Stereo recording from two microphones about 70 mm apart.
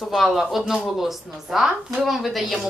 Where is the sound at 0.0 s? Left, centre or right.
Centre.